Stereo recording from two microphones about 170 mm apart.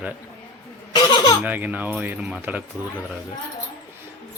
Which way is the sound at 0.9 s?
30° left (ahead or behind).